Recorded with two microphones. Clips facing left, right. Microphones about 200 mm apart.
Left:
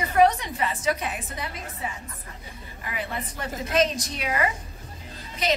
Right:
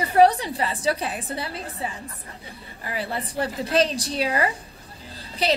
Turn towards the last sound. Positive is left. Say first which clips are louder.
# right 2 dB
turn(degrees=-35)  # may be behind; listen again after turning